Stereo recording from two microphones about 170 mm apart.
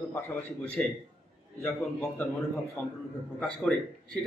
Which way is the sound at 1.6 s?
15° left (ahead or behind).